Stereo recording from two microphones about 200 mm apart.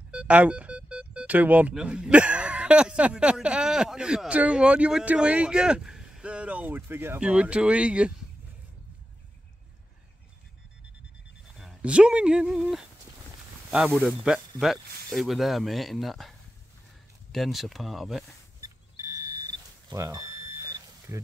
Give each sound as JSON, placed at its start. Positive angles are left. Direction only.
{"t": 0.1, "sound": "speech", "side_deg": -5}
{"t": 11.5, "sound": "speech", "side_deg": 0}
{"t": 18.6, "sound": "a sound", "side_deg": -15}
{"t": 19.9, "sound": "smoke detector", "side_deg": -15}